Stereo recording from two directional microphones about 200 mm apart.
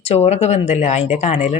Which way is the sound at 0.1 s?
30° left (ahead or behind).